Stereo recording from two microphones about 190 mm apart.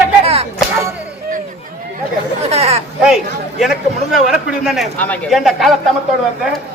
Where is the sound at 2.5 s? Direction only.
35° right (ahead or behind).